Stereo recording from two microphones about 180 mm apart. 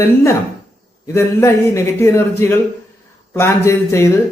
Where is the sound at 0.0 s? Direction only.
15° left (ahead or behind).